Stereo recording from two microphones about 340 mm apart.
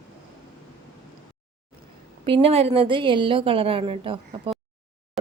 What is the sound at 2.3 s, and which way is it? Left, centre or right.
A woman's voice, centre.